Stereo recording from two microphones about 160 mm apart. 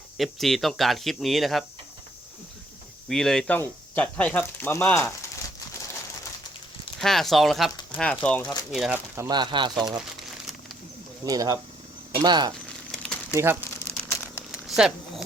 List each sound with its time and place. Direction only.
0.2 s speech: centre (ahead or behind)
3.1 s speech: 5° left (ahead or behind)
7.0 s speech: centre (ahead or behind)
9.3 s speech: 30° right (ahead or behind)
11.3 s speech: 20° right (ahead or behind)
12.9 s crumpling: 5° left (ahead or behind)
13.3 s speech: 15° right (ahead or behind)
14.1 s crumpling: 15° left (ahead or behind)
14.7 s speech: 5° right (ahead or behind)